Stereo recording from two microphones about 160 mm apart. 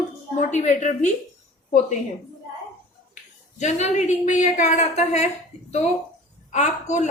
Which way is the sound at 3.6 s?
45° left (ahead or behind).